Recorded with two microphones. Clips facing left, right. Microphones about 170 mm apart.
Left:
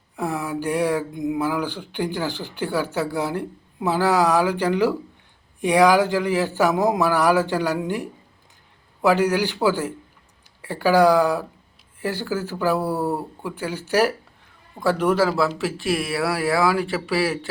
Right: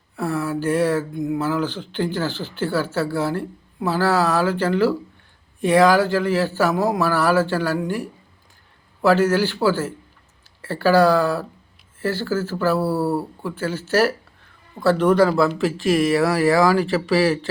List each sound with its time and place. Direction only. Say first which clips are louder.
0.2 s speech: right 2 dB; 15° left (ahead or behind)